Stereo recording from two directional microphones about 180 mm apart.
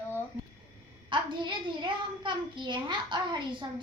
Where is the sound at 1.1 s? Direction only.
25° right (ahead or behind).